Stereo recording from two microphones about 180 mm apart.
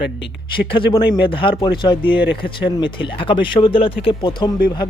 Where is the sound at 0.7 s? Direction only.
25° left (ahead or behind).